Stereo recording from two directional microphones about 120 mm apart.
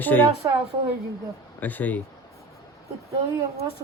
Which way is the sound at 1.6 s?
15° left (ahead or behind).